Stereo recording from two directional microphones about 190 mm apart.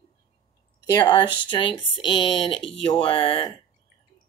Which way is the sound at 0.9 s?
20° left (ahead or behind).